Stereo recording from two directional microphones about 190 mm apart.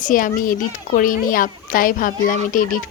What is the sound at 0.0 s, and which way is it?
A child's voice, 45° left (ahead or behind).